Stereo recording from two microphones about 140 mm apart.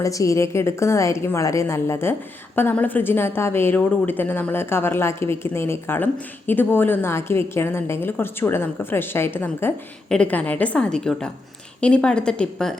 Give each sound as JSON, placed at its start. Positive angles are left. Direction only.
{"t": 0.0, "sound": "a woman's voice", "side_deg": 25}